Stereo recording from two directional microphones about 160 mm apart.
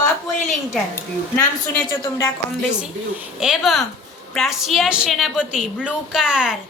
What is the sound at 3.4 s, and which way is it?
A woman's voice, centre (ahead or behind).